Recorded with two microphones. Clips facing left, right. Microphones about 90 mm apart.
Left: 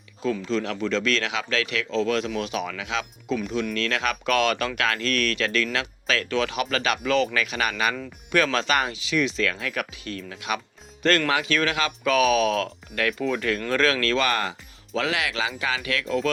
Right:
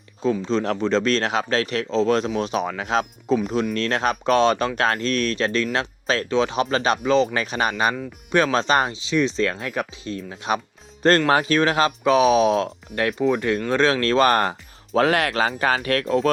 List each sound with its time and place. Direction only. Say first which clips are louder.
0.2 s speech: right 4 dB; 30° right (ahead or behind)
7.3 s speech: right 3 dB; 35° right (ahead or behind)
11.3 s speech: right 5 dB; 35° right (ahead or behind)